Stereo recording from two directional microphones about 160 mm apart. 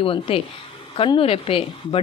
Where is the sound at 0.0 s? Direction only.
35° left (ahead or behind).